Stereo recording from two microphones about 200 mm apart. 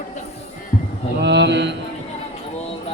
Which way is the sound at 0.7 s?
35° left (ahead or behind).